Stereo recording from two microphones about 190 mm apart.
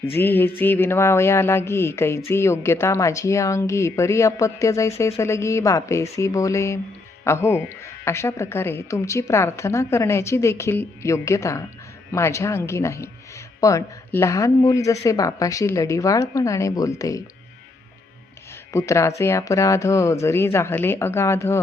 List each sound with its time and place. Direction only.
0.0 s speech: 10° left (ahead or behind)
18.7 s speech: 15° left (ahead or behind)